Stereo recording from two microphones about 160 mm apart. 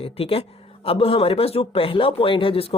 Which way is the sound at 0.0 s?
35° left (ahead or behind).